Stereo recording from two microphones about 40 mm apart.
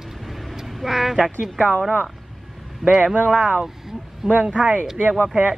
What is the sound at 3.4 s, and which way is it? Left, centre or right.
Speech, centre.